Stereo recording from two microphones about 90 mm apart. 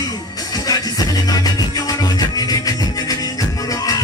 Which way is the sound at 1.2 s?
45° left (ahead or behind).